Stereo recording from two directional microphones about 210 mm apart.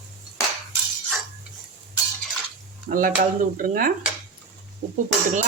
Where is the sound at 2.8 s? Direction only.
40° right (ahead or behind).